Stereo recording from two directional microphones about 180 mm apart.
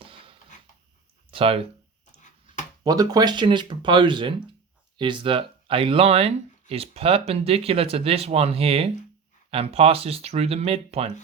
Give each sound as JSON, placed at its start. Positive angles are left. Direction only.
{"t": 0.0, "sound": "a sound", "side_deg": -30}
{"t": 1.3, "sound": "speech", "side_deg": -30}
{"t": 2.8, "sound": "speech", "side_deg": -20}